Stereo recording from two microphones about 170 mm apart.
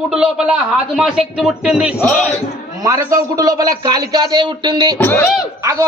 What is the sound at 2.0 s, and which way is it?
Speech, 10° left (ahead or behind).